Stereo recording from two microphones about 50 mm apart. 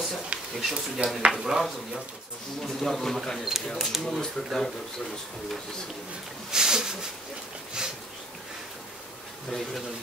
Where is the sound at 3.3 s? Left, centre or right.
Centre.